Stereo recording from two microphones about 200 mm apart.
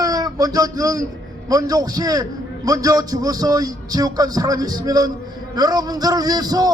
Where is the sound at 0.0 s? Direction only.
20° right (ahead or behind).